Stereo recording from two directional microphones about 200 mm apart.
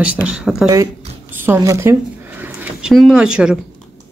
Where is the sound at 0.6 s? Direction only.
15° right (ahead or behind).